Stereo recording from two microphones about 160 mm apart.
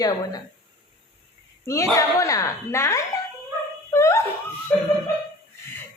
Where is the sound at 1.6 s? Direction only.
20° left (ahead or behind).